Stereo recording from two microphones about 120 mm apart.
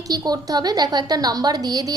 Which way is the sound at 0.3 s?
35° right (ahead or behind).